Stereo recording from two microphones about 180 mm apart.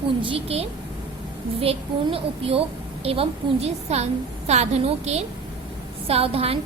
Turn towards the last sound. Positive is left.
turn(degrees=-35)  # may be behind; listen again after turning